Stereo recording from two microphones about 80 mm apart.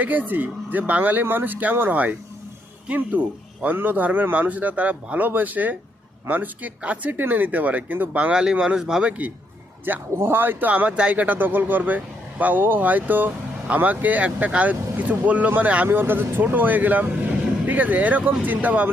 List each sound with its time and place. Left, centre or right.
0.0 s speech: right
9.8 s speech: right